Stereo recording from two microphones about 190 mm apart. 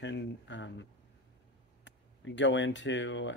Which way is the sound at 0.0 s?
70° left (ahead or behind).